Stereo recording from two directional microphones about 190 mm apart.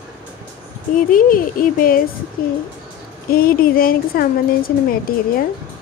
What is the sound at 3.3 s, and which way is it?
Speech, 50° left (ahead or behind).